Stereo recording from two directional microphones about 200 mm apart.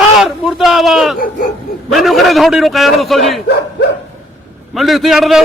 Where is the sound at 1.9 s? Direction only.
Centre (ahead or behind).